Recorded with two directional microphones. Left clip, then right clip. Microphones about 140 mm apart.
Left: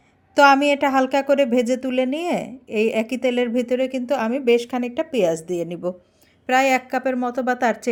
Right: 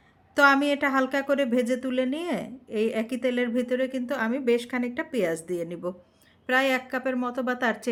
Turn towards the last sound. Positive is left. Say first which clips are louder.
# left 6 dB
turn(degrees=30)  # may be behind; listen again after turning